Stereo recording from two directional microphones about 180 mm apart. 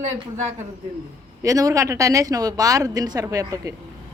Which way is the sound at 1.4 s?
20° right (ahead or behind).